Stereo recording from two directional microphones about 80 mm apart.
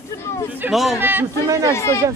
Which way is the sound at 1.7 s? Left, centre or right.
Left.